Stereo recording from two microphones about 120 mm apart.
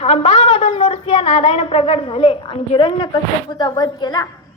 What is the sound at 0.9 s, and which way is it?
A woman's voice, 50° left (ahead or behind).